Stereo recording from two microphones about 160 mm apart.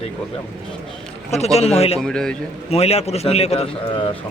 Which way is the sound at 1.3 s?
40° left (ahead or behind).